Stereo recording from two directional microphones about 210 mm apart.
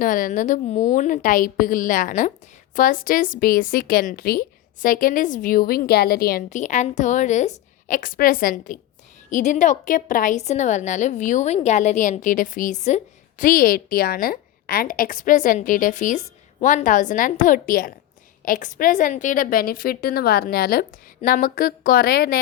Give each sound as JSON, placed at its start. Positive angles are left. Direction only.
{"t": 0.0, "sound": "a woman's voice", "side_deg": 40}